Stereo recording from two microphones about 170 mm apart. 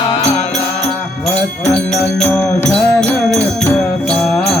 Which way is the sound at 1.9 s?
5° left (ahead or behind).